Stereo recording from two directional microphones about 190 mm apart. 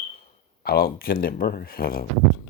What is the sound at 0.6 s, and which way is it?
Speech, 50° left (ahead or behind).